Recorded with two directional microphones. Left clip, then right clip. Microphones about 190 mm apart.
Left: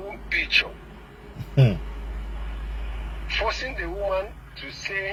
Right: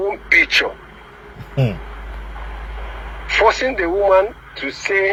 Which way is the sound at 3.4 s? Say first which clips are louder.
Right 13 dB; 30° right (ahead or behind).